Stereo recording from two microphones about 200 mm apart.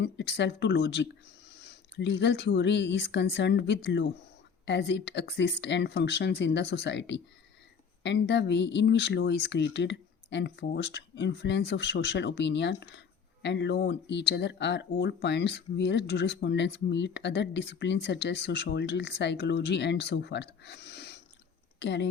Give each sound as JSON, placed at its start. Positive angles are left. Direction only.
{"t": 0.0, "sound": "speech", "side_deg": 60}